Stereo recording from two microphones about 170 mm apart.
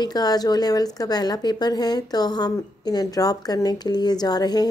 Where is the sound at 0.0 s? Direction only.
25° left (ahead or behind).